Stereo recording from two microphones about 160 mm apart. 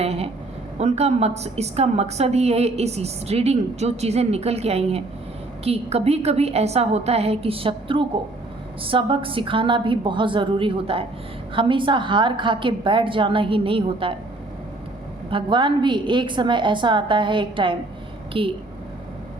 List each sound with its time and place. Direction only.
0.0 s a sound: 40° right (ahead or behind)
0.8 s a woman's voice: 40° right (ahead or behind)
15.3 s a woman's voice: 30° right (ahead or behind)